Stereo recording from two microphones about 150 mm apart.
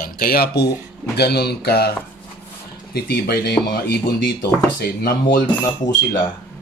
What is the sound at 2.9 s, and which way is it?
Speech, 90° left.